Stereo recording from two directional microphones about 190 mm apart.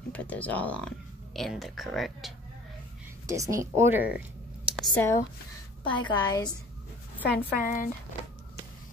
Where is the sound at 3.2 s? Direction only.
15° right (ahead or behind).